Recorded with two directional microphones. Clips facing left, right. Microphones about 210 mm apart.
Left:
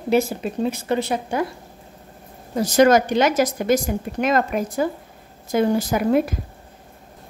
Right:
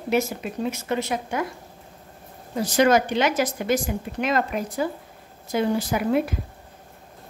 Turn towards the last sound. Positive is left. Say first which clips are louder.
# left 4 dB
turn(degrees=45)  # may be behind; listen again after turning